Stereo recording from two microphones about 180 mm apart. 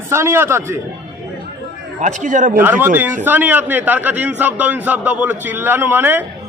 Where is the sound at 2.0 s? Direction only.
40° right (ahead or behind).